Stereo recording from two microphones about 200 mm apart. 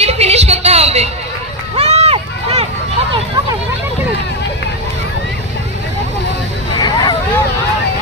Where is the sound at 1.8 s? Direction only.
30° right (ahead or behind).